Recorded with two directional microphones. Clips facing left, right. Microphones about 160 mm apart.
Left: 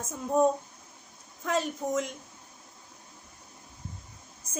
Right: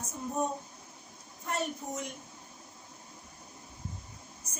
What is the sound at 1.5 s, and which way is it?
Speech, 90° left.